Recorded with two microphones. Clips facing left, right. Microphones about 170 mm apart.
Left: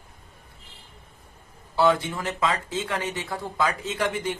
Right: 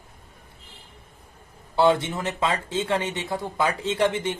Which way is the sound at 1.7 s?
25° right (ahead or behind).